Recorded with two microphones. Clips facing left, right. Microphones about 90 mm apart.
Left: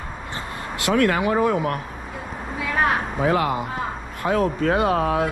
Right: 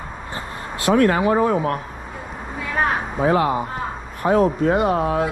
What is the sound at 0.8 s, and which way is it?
Speech, 30° right (ahead or behind).